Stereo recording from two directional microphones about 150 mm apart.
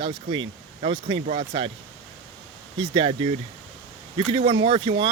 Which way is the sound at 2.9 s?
35° right (ahead or behind).